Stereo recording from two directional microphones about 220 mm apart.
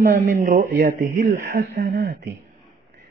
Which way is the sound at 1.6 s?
50° right (ahead or behind).